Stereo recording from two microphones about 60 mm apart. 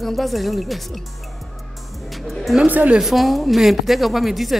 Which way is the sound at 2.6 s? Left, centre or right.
Right.